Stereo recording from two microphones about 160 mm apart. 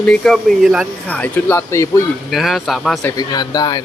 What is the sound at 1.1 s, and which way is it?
Speech, 10° left (ahead or behind).